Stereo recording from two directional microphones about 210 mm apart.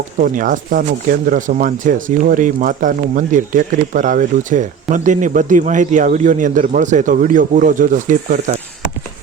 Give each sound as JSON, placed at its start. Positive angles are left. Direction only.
{"t": 0.2, "sound": "speech", "side_deg": -40}